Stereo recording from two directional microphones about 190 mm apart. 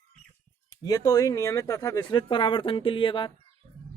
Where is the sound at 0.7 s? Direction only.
20° left (ahead or behind).